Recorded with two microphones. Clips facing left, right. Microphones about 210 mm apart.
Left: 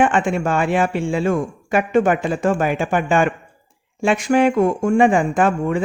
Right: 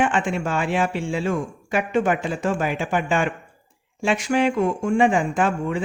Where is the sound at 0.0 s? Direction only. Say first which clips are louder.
Left 5 dB; 50° left (ahead or behind).